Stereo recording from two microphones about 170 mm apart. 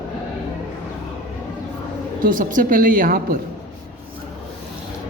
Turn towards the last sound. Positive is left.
turn(degrees=-55)  # may be behind; listen again after turning